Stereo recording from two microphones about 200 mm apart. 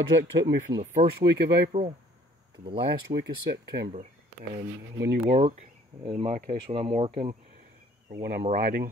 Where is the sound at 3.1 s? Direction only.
55° right (ahead or behind).